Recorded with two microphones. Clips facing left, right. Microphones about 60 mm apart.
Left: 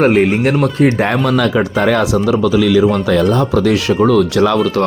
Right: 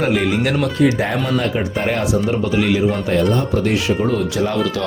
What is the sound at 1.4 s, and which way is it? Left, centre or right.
Speech, left.